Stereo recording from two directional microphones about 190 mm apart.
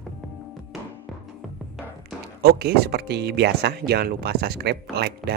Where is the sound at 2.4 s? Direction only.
60° right (ahead or behind).